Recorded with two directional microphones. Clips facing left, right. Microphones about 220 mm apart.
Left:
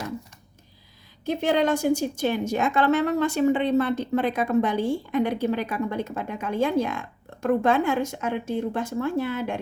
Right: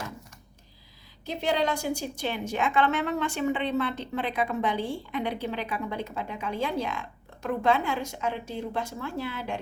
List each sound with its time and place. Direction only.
1.2 s a woman's voice: 50° left (ahead or behind)